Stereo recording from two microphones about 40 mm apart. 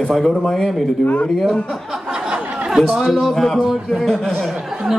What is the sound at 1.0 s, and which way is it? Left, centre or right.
Speech, left.